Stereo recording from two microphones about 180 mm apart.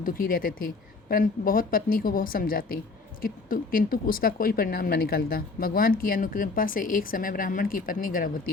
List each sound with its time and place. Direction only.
0.0 s speech: 50° left (ahead or behind)